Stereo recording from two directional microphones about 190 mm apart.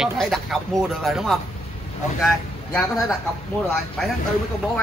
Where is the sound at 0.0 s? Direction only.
Centre (ahead or behind).